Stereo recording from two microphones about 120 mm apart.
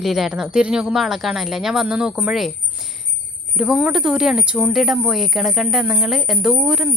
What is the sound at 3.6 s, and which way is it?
Speech, 5° right (ahead or behind).